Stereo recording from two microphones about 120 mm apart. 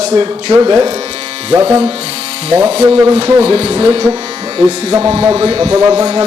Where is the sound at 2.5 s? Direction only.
65° right (ahead or behind).